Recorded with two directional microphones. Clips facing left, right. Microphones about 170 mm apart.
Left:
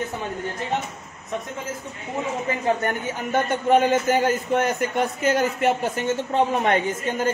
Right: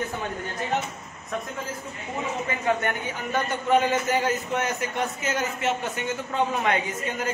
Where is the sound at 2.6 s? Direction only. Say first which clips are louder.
Left 2 dB; 35° left (ahead or behind).